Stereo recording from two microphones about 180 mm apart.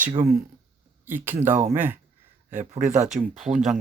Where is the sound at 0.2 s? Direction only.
55° right (ahead or behind).